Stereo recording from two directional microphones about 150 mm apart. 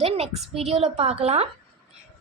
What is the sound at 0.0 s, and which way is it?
A woman's voice, 40° right (ahead or behind).